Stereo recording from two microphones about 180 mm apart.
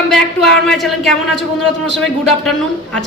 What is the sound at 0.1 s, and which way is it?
A woman's voice, centre (ahead or behind).